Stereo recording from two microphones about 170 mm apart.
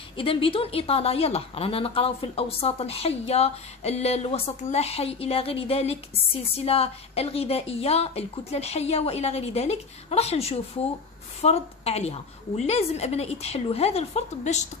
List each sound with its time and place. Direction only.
0.2 s a woman's voice: 30° left (ahead or behind)